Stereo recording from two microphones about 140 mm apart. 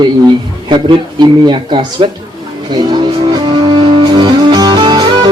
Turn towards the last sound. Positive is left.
turn(degrees=-30)  # may be behind; listen again after turning